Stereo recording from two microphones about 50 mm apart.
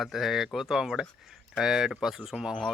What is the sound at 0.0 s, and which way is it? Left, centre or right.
Speech, centre.